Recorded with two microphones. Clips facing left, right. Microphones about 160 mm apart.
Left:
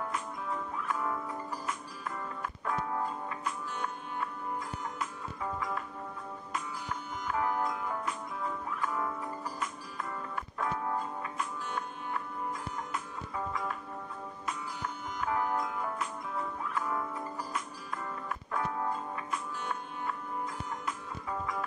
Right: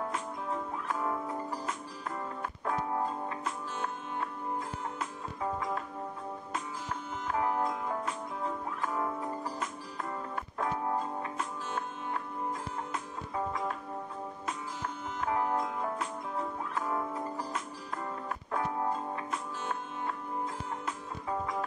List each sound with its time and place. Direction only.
0.1 s music: 25° right (ahead or behind)
4.9 s music: 25° right (ahead or behind)
7.2 s music: 25° right (ahead or behind)
11.3 s music: 30° right (ahead or behind)
15.3 s music: 25° right (ahead or behind)
18.5 s music: 20° right (ahead or behind)
20.8 s music: 25° right (ahead or behind)